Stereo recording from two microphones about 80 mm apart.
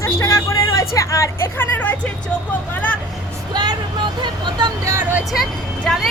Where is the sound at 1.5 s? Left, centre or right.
Left.